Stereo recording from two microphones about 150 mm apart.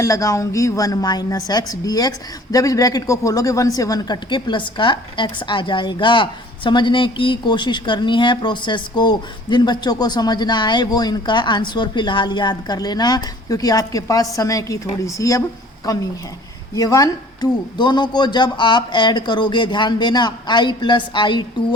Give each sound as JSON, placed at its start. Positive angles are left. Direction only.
{"t": 0.0, "sound": "speech", "side_deg": 20}